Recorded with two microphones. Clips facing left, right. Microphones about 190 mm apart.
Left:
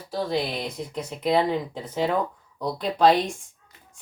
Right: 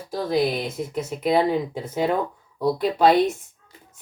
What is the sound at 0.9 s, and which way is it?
Speech, 5° right (ahead or behind).